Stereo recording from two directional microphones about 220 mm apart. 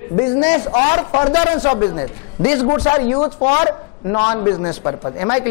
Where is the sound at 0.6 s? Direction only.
25° left (ahead or behind).